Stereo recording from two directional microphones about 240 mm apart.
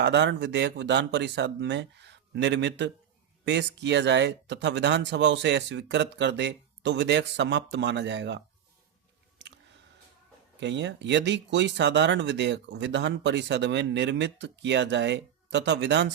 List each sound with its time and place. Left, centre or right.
0.0 s speech: right
10.6 s speech: right